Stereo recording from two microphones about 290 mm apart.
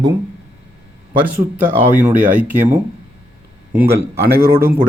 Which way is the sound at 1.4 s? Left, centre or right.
Centre.